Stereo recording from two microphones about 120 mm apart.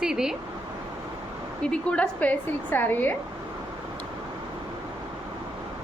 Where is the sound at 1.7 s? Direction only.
10° left (ahead or behind).